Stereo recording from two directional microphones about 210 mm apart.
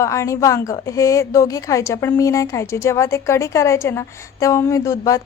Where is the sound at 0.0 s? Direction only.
15° left (ahead or behind).